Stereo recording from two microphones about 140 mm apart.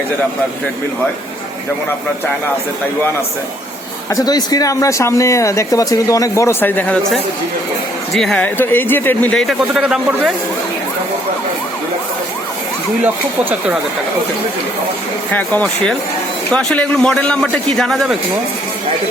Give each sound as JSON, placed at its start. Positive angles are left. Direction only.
{"t": 4.1, "sound": "speech", "side_deg": 25}
{"t": 8.1, "sound": "speech", "side_deg": 5}
{"t": 13.0, "sound": "speech", "side_deg": -10}
{"t": 15.3, "sound": "a man's voice", "side_deg": 10}